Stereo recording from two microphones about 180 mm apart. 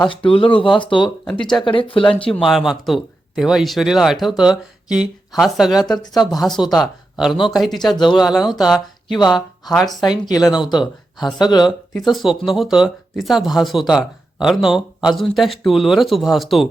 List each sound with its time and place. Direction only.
0.1 s speech: 30° left (ahead or behind)
2.3 s speech: centre (ahead or behind)
5.9 s speech: 20° left (ahead or behind)
6.3 s speech: centre (ahead or behind)
7.9 s speech: 25° left (ahead or behind)
8.2 s speech: centre (ahead or behind)
9.1 s speech: 20° left (ahead or behind)
9.7 s speech: centre (ahead or behind)
10.1 s speech: 20° left (ahead or behind)
12.1 s speech: centre (ahead or behind)